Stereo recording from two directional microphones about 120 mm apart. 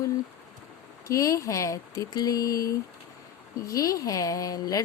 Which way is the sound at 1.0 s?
25° left (ahead or behind).